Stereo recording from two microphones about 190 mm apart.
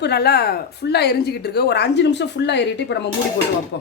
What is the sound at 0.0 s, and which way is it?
Speech, 60° left (ahead or behind).